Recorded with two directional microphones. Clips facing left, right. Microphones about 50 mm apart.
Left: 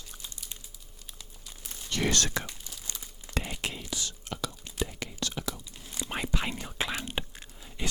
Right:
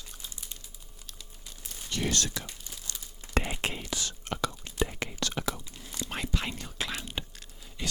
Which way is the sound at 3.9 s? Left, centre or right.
Right.